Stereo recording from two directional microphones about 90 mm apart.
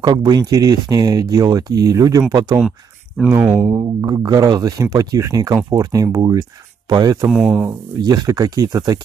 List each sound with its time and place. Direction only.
0.0 s speech: 50° right (ahead or behind)
3.7 s speech: 45° right (ahead or behind)
7.2 s speech: 5° right (ahead or behind)
8.0 s speech: 45° right (ahead or behind)